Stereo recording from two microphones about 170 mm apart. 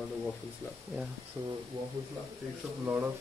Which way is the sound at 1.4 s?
15° right (ahead or behind).